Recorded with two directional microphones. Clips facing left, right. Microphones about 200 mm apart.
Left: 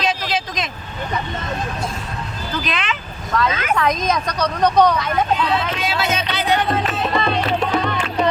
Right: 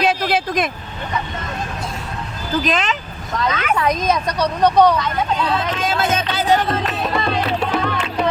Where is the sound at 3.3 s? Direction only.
20° right (ahead or behind).